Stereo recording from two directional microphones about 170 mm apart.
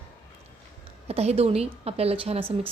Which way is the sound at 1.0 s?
40° right (ahead or behind).